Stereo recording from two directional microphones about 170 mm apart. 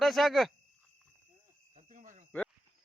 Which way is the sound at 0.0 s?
Centre (ahead or behind).